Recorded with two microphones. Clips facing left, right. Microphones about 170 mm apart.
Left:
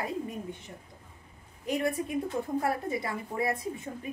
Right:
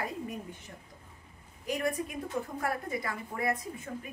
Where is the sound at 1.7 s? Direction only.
25° left (ahead or behind).